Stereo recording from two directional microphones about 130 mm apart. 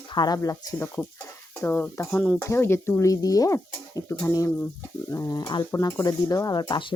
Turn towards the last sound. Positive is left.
turn(degrees=35)  # may be behind; listen again after turning